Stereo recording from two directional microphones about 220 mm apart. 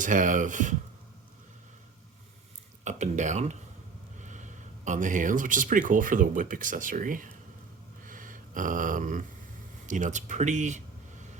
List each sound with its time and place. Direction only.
0.0 s speech: 35° right (ahead or behind)
2.8 s speech: 35° right (ahead or behind)
8.0 s a sound: 35° right (ahead or behind)
9.8 s speech: 35° right (ahead or behind)